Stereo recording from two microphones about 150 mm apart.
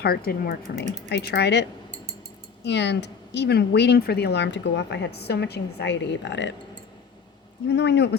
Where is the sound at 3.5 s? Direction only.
90° left.